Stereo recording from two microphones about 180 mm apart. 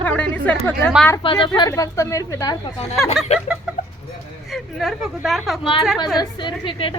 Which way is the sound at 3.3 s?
35° left (ahead or behind).